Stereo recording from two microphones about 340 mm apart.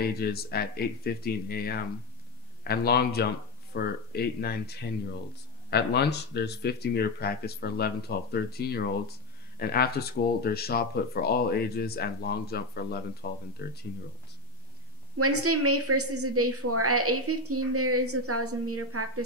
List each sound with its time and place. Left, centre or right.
0.0 s speech: left
15.1 s a woman's voice: right